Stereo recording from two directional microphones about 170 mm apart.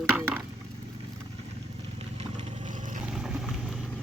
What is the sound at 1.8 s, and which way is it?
Vehicle, 40° right (ahead or behind).